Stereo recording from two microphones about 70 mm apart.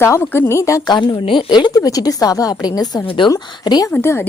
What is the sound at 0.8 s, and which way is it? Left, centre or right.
Speech, left.